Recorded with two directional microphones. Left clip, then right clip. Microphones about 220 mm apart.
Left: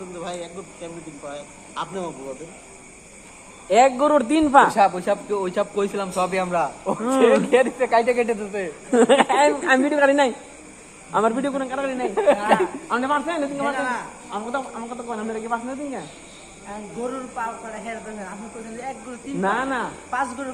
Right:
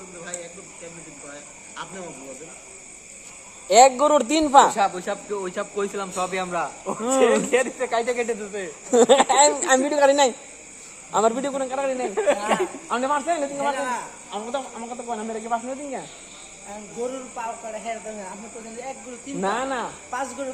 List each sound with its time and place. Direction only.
1.8 s a man's voice: 45° left (ahead or behind)
3.7 s a woman's voice: 45° right (ahead or behind)
4.7 s speech: 15° left (ahead or behind)
7.0 s a man's voice: 40° right (ahead or behind)
7.5 s speech: 15° left (ahead or behind)
8.9 s a woman's voice: 45° right (ahead or behind)
12.1 s speech: 10° left (ahead or behind)
12.5 s a man's voice: 35° right (ahead or behind)
19.4 s a man's voice: 35° right (ahead or behind)